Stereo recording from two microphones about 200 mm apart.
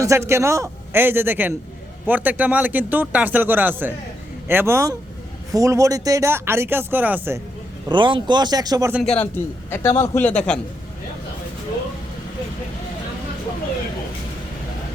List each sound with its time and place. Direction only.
0.0 s speech: 15° right (ahead or behind)
7.9 s speech: 25° right (ahead or behind)
8.9 s speech: 5° right (ahead or behind)
9.1 s a man's voice: 10° left (ahead or behind)